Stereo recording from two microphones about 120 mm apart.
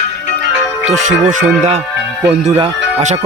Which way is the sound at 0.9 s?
90° right.